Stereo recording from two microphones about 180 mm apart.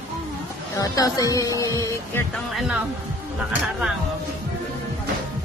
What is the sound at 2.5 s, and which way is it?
Speech, 5° right (ahead or behind).